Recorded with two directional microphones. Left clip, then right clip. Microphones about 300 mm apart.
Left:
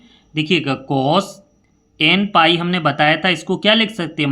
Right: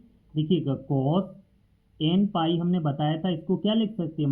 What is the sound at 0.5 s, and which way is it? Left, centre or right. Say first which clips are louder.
Speech: left 10 dB; left.